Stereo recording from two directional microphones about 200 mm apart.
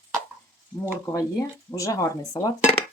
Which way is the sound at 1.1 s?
15° left (ahead or behind).